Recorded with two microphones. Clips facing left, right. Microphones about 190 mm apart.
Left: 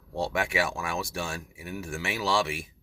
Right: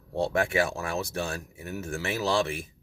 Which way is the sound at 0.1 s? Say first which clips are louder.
Right 3 dB; 35° right (ahead or behind).